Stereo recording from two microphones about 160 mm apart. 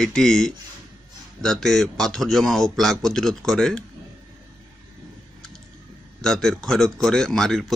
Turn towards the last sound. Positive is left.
turn(degrees=0)  # may be behind; listen again after turning